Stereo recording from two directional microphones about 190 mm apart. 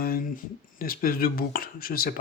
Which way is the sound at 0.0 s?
50° left (ahead or behind).